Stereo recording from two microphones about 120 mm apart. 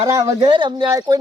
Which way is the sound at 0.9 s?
30° right (ahead or behind).